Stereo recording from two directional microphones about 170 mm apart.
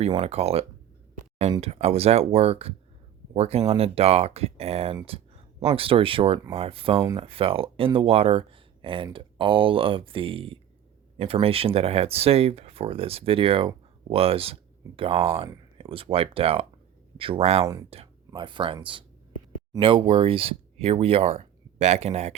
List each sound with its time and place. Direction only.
0.0 s speech: 35° right (ahead or behind)
1.6 s speech: 35° right (ahead or behind)